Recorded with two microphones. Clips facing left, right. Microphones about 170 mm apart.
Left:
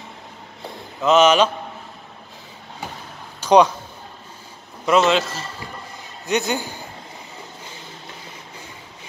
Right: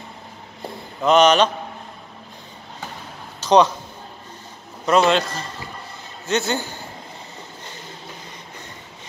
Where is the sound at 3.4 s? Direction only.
10° left (ahead or behind).